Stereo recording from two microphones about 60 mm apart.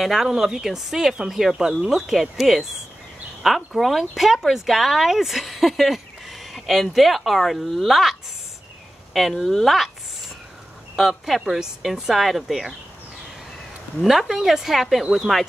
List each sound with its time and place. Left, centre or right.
0.0 s speech: centre
9.3 s speech: centre
11.0 s speech: centre
14.0 s speech: centre